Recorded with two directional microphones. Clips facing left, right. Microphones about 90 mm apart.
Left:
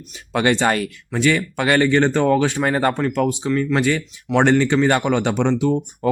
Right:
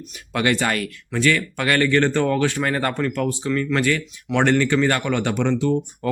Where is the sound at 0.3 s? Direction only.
25° left (ahead or behind).